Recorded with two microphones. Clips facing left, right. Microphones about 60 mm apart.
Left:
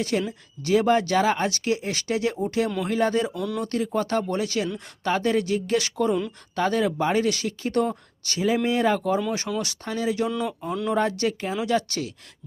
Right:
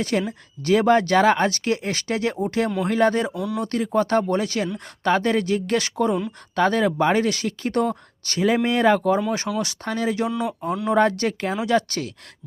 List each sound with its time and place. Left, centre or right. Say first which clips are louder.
0.0 s speech: right 2 dB; right
3.3 s speech: right 2 dB; centre
3.6 s speech: right 5 dB; right
10.2 s speech: right 2 dB; centre
10.9 s speech: right 5 dB; right